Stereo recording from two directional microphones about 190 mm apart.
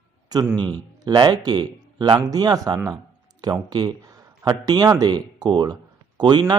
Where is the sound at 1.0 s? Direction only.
20° right (ahead or behind).